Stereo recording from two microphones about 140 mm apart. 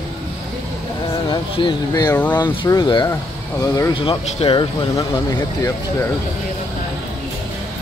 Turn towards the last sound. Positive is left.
turn(degrees=20)  # may be behind; listen again after turning